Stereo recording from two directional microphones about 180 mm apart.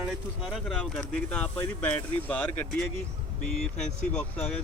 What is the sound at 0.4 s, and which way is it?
Speech, centre (ahead or behind).